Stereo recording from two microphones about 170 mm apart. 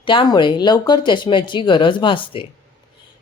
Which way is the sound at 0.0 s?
30° left (ahead or behind).